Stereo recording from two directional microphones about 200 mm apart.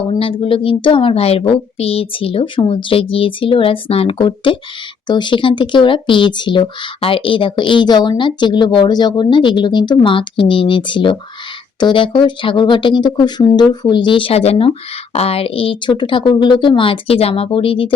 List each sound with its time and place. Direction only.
0.1 s speech: 25° left (ahead or behind)